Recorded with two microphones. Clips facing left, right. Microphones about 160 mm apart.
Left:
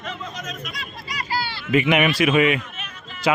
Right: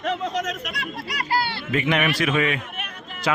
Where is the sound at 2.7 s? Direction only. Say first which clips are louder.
Right 3 dB; 60° right (ahead or behind).